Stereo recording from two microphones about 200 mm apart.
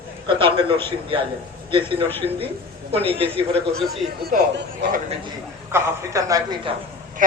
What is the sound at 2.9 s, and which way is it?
Speech, 30° right (ahead or behind).